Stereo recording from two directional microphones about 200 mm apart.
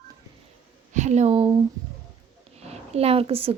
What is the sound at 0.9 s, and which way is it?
Speech, 35° right (ahead or behind).